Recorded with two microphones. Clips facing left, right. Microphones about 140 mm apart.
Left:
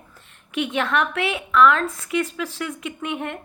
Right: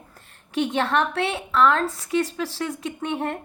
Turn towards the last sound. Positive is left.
turn(degrees=-35)  # may be behind; listen again after turning